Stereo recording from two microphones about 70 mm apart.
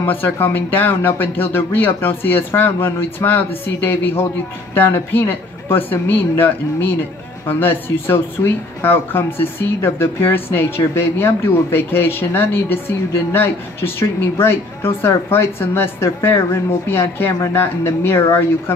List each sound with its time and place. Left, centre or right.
0.0 s speech: left